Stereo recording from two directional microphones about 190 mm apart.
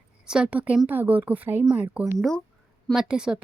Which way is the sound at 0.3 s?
5° right (ahead or behind).